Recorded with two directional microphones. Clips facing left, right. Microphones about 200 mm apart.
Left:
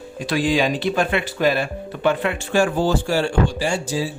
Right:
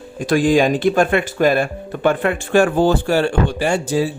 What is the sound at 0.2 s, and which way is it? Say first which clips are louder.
Speech: right 5 dB; 50° right (ahead or behind).